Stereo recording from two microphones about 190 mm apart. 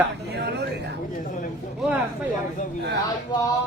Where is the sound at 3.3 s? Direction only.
20° left (ahead or behind).